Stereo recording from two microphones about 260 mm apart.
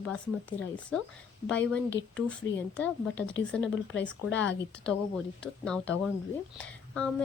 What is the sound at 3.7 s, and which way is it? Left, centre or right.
Speech, left.